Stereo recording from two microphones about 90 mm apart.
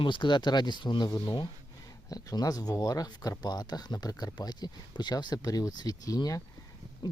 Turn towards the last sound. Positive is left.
turn(degrees=40)  # may be behind; listen again after turning